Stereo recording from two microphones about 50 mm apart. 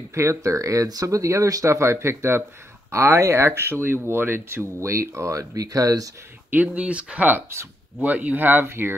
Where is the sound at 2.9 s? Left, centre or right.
Right.